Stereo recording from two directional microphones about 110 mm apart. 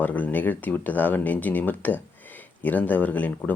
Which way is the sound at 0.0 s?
15° left (ahead or behind).